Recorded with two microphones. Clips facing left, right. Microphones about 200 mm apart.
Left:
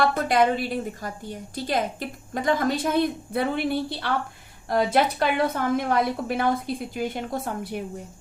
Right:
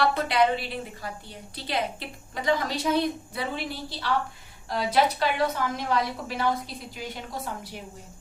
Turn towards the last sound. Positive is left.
turn(degrees=55)  # may be behind; listen again after turning